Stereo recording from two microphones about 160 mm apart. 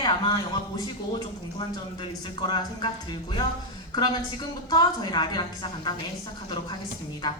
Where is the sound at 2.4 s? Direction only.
30° left (ahead or behind).